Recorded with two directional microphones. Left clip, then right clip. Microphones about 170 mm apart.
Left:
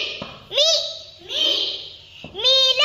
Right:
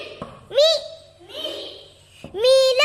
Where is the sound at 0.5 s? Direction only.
40° right (ahead or behind).